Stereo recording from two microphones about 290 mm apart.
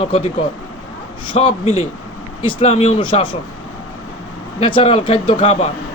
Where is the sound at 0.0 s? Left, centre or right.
Centre.